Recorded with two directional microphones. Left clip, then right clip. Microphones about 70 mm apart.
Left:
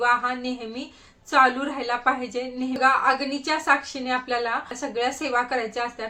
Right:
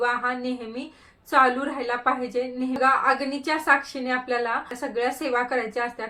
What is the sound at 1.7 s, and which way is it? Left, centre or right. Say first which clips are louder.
A woman's voice: left 1 dB; centre.